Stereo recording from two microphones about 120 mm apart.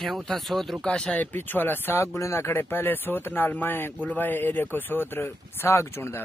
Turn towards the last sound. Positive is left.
turn(degrees=20)  # may be behind; listen again after turning